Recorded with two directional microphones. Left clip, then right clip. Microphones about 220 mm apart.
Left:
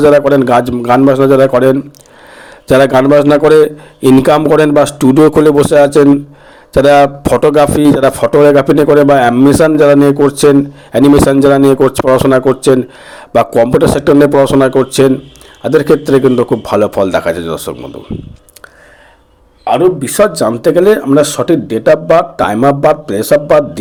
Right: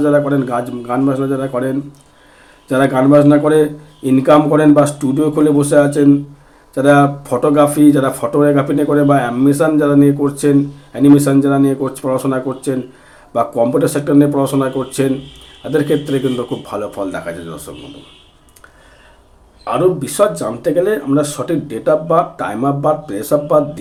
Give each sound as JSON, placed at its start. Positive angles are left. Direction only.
{"t": 0.0, "sound": "a man's voice", "side_deg": 45}
{"t": 19.6, "sound": "a man's voice", "side_deg": 30}